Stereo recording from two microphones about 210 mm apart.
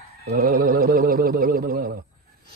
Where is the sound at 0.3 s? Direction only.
45° right (ahead or behind).